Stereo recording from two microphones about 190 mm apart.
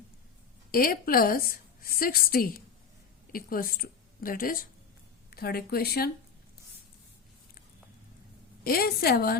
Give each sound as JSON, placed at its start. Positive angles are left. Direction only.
{"t": 0.7, "sound": "a woman's voice", "side_deg": 50}
{"t": 8.6, "sound": "speech", "side_deg": 55}